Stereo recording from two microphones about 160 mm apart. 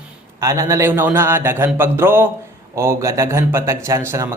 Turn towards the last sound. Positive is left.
turn(degrees=-15)  # may be behind; listen again after turning